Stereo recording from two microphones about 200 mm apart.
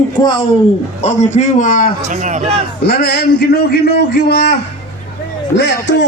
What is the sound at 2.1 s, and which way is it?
Speech, 35° right (ahead or behind).